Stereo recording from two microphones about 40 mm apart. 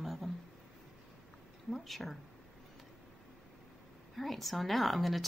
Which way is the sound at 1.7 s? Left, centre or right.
Centre.